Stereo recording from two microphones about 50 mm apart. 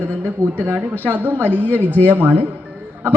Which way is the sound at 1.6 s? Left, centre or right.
Left.